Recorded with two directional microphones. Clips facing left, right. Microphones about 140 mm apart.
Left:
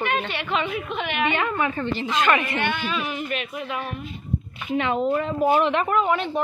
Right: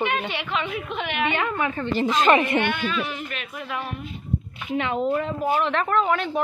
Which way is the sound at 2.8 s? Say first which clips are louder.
Even; 5° left (ahead or behind).